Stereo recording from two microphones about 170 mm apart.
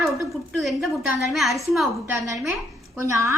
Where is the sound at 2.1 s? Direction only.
15° right (ahead or behind).